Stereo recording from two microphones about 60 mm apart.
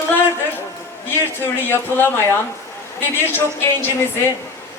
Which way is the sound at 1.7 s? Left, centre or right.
Left.